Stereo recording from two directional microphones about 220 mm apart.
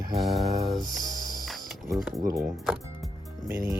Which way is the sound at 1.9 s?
Centre (ahead or behind).